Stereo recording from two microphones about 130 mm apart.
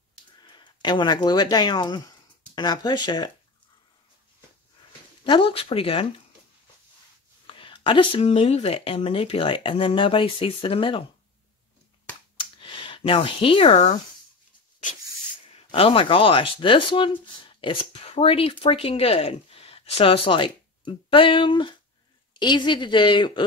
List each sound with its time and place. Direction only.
0.4 s speech: 35° left (ahead or behind)
5.2 s speech: 40° left (ahead or behind)
7.4 s speech: 40° left (ahead or behind)
12.4 s a sound: 40° left (ahead or behind)
15.7 s speech: 45° left (ahead or behind)